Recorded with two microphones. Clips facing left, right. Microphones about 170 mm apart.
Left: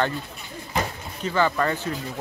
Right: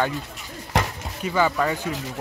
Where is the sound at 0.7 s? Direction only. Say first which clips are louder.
Right 2 dB; 80° right.